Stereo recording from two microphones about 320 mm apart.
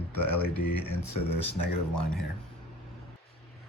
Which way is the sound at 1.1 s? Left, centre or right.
Left.